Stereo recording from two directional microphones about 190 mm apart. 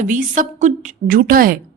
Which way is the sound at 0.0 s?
40° right (ahead or behind).